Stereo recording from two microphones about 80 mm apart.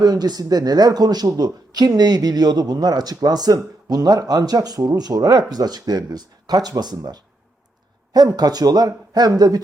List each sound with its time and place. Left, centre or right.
0.0 s speech: right